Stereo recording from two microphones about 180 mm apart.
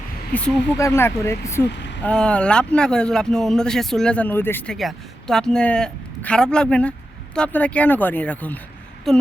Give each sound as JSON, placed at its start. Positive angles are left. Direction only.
{"t": 0.3, "sound": "speech", "side_deg": 5}
{"t": 1.7, "sound": "a sound", "side_deg": 75}
{"t": 2.0, "sound": "speech", "side_deg": 5}